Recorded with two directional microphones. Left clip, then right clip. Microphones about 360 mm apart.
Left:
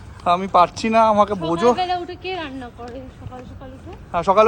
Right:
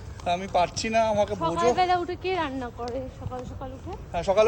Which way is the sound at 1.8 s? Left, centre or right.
Centre.